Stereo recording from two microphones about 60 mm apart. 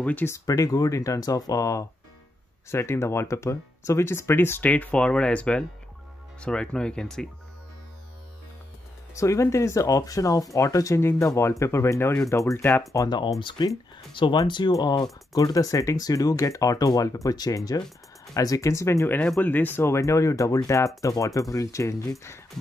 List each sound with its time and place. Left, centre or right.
0.5 s speech: left
2.7 s speech: left
4.6 s speech: centre
9.1 s speech: left
11.0 s speech: left
12.2 s speech: left
12.9 s speech: left
14.3 s speech: left
15.3 s speech: left
19.4 s speech: left
20.0 s speech: left